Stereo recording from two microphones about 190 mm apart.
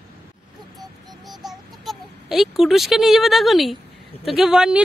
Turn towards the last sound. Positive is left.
turn(degrees=-5)  # may be behind; listen again after turning